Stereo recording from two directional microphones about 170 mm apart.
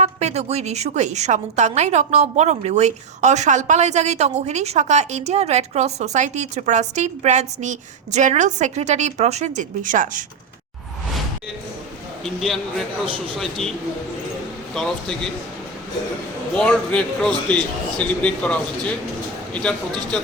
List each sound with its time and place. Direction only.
0.0 s a woman's voice: 40° right (ahead or behind)
13.4 s a man's voice: centre (ahead or behind)
14.8 s a man's voice: 5° left (ahead or behind)
16.6 s a man's voice: 5° left (ahead or behind)